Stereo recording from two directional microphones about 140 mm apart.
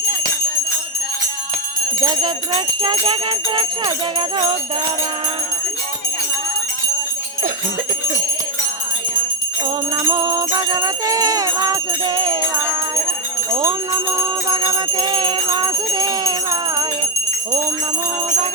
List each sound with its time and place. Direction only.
2.0 s jingle bell: 30° right (ahead or behind)
9.6 s music: 35° right (ahead or behind)
14.4 s jingle bell: 35° right (ahead or behind)